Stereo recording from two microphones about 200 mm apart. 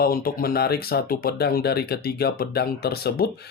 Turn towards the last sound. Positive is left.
turn(degrees=50)  # may be behind; listen again after turning